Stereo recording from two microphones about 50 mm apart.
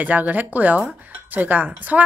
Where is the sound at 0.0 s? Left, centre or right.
Right.